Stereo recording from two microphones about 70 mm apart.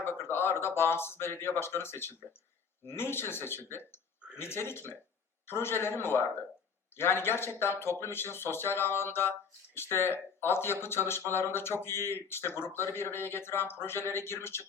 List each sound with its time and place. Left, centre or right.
0.0 s speech: left